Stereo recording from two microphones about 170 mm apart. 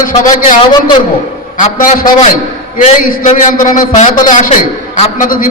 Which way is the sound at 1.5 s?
50° left (ahead or behind).